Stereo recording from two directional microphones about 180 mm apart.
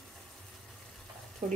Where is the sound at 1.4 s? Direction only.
40° right (ahead or behind).